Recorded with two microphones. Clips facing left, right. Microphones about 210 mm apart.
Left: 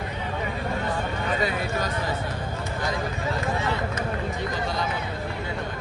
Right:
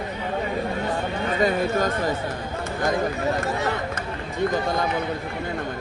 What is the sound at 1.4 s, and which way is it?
Speech, 45° right (ahead or behind).